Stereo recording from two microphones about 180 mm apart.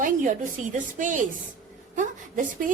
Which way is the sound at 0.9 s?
45° right (ahead or behind).